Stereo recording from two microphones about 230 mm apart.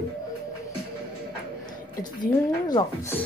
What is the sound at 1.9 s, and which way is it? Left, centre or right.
Speech, centre.